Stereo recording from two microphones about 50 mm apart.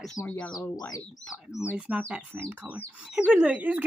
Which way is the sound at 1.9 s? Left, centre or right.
Right.